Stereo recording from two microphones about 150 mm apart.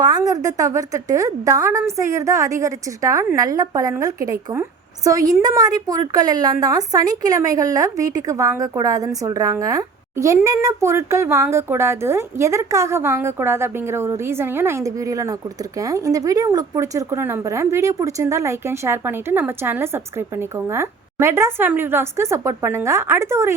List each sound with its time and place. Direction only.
0.0 s a woman's voice: 25° right (ahead or behind)
5.4 s a woman's voice: 25° right (ahead or behind)